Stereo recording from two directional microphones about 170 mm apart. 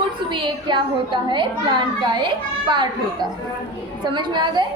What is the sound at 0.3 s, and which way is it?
A child's voice, 30° right (ahead or behind).